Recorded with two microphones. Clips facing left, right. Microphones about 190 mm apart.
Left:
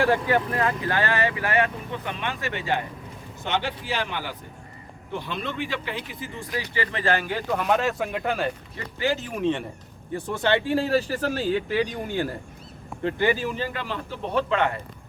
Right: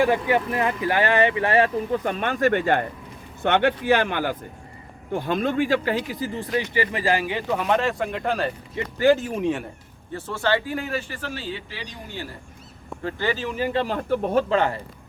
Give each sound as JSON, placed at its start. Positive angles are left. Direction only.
{"t": 0.0, "sound": "speech", "side_deg": -15}
{"t": 6.7, "sound": "speech", "side_deg": -10}
{"t": 9.0, "sound": "speech", "side_deg": -50}
{"t": 9.4, "sound": "speech", "side_deg": -5}
{"t": 10.2, "sound": "speech", "side_deg": 15}
{"t": 13.0, "sound": "speech", "side_deg": 20}
{"t": 13.7, "sound": "speech", "side_deg": -45}
{"t": 14.5, "sound": "speech", "side_deg": -35}